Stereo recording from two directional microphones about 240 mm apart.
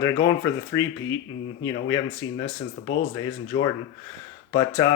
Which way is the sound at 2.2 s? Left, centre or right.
Left.